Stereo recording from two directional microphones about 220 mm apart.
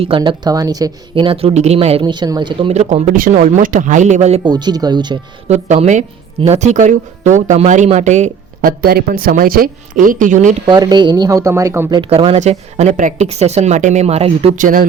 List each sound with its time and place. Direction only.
0.0 s speech: 25° right (ahead or behind)
5.5 s speech: 30° right (ahead or behind)
10.7 s speech: 20° right (ahead or behind)
11.9 s speech: 25° right (ahead or behind)